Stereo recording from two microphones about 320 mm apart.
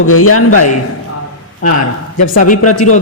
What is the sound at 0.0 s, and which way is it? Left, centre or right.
Speech, left.